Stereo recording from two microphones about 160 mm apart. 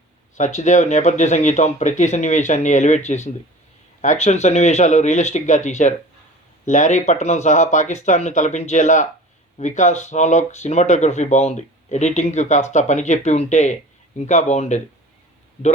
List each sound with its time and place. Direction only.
0.3 s speech: 50° left (ahead or behind)